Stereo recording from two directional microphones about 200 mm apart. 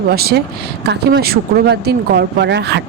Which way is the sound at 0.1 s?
50° right (ahead or behind).